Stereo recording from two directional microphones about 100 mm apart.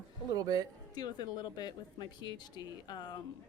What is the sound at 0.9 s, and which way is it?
A woman's voice, 45° left (ahead or behind).